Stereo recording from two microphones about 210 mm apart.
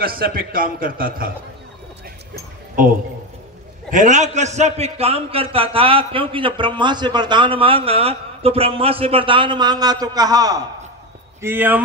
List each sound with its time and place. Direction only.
0.0 s a man's voice: 45° right (ahead or behind)
3.9 s a man's voice: 35° right (ahead or behind); by 11.8 s 10° right (ahead or behind)